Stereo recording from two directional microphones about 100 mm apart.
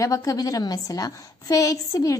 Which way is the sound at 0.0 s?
35° left (ahead or behind).